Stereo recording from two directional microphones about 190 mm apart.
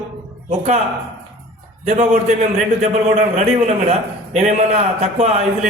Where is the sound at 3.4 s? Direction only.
40° right (ahead or behind).